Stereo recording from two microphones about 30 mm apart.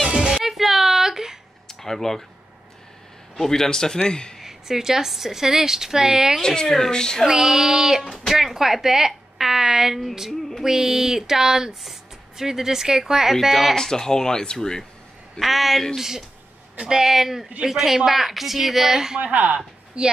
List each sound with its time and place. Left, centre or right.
0.5 s a sound: centre
1.7 s speech: centre
3.3 s speech: centre
4.4 s a woman's voice: centre
6.4 s speech: left
7.2 s a woman's voice: centre
13.3 s a woman's voice: centre
13.7 s speech: centre
15.3 s a woman's voice: centre
16.8 s speech: right
17.1 s a woman's voice: centre
19.3 s speech: right
20.0 s a woman's voice: right